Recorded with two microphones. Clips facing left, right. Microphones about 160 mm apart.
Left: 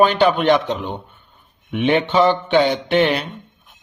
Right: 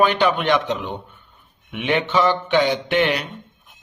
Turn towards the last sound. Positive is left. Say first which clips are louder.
# left 3 dB
turn(degrees=30)  # may be behind; listen again after turning